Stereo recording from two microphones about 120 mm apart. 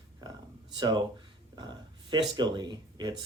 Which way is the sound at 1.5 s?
35° right (ahead or behind).